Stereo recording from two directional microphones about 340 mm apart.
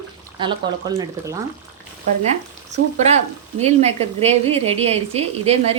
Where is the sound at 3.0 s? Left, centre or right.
Centre.